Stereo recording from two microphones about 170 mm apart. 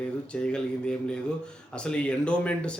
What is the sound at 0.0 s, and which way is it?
A man's voice, 5° left (ahead or behind).